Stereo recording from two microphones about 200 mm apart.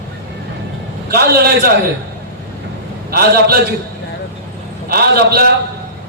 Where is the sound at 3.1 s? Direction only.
50° right (ahead or behind).